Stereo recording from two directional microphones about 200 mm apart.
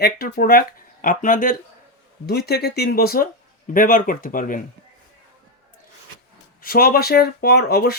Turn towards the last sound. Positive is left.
turn(degrees=50)  # may be behind; listen again after turning